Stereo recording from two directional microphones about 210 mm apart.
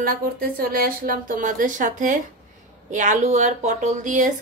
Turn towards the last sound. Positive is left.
turn(degrees=-35)  # may be behind; listen again after turning